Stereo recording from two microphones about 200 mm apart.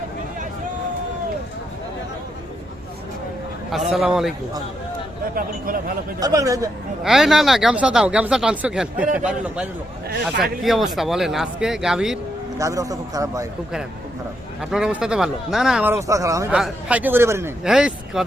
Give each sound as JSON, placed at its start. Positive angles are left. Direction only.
{"t": 3.9, "sound": "speech", "side_deg": 0}
{"t": 5.3, "sound": "a man's voice", "side_deg": -45}
{"t": 6.1, "sound": "a man's voice", "side_deg": -15}
{"t": 7.0, "sound": "speech", "side_deg": 0}
{"t": 12.5, "sound": "a man's voice", "side_deg": -15}
{"t": 14.6, "sound": "speech", "side_deg": -5}
{"t": 16.5, "sound": "speech", "side_deg": -5}